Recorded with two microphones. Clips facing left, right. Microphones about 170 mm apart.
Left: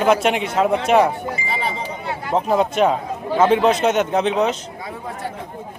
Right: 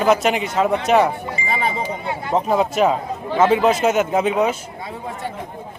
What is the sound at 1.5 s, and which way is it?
Speech, 50° right (ahead or behind).